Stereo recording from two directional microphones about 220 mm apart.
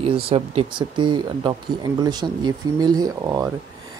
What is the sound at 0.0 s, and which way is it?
Speech, 25° right (ahead or behind).